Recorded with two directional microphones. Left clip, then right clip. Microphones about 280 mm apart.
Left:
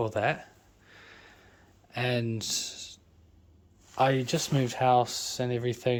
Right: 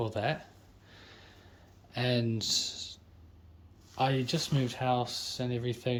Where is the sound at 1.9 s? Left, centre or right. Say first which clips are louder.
Left 1 dB; centre.